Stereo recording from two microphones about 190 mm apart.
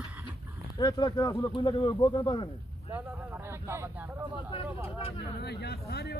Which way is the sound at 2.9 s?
10° right (ahead or behind).